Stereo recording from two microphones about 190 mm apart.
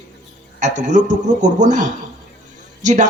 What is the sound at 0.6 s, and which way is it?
Speech, 40° right (ahead or behind).